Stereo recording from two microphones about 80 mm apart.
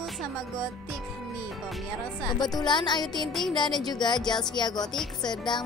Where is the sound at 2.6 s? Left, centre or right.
Left.